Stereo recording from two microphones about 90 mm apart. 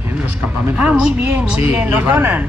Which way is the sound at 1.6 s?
20° right (ahead or behind).